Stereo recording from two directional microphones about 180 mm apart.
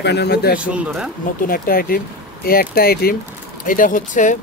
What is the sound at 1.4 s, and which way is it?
Speech, 50° left (ahead or behind).